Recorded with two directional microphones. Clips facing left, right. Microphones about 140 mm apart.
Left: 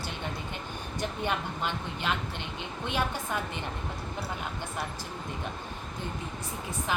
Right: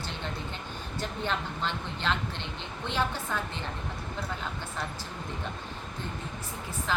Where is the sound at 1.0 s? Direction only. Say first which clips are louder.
Left 1 dB; 10° left (ahead or behind).